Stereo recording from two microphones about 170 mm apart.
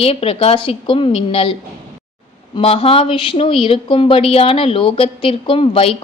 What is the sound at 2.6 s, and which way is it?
A woman's voice, 35° left (ahead or behind).